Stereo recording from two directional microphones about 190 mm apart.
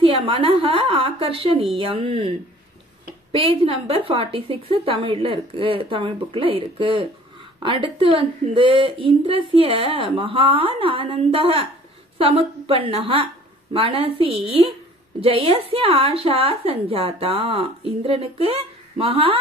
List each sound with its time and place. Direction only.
0.0 s a woman's voice: 25° right (ahead or behind)